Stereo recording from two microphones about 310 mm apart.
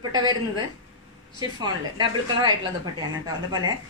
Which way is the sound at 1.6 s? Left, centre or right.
Centre.